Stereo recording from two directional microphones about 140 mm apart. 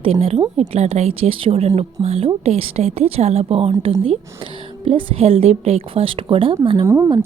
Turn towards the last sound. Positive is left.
turn(degrees=-20)  # may be behind; listen again after turning